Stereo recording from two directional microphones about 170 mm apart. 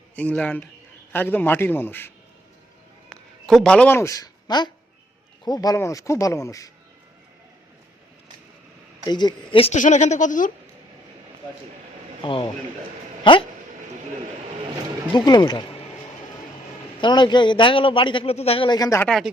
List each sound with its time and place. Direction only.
0.2 s a man's voice: 10° left (ahead or behind)
3.1 s a man's voice: centre (ahead or behind); by 6.7 s 20° left (ahead or behind)
9.0 s a man's voice: 25° left (ahead or behind)
9.7 s speech: 45° left (ahead or behind)
12.2 s a man's voice: 30° left (ahead or behind)
15.1 s a man's voice: 25° left (ahead or behind)
17.0 s a man's voice: 25° left (ahead or behind)
19.0 s speech: 5° left (ahead or behind)